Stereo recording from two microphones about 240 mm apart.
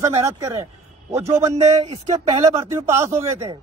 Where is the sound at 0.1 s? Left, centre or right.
Centre.